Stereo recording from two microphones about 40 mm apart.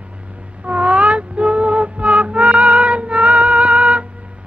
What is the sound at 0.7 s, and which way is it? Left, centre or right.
Music, right.